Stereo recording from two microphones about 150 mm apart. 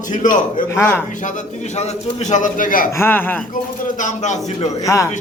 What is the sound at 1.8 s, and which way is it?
A man's voice, 55° left (ahead or behind).